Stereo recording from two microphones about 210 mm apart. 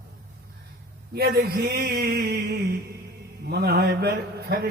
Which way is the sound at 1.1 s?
50° right (ahead or behind).